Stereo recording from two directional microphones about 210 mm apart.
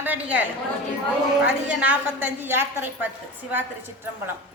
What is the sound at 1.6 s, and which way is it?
A woman's voice, 10° right (ahead or behind).